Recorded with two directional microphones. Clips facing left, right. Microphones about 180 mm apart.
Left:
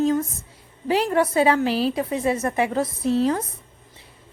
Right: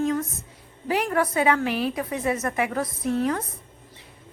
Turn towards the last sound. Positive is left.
turn(degrees=30)  # may be behind; listen again after turning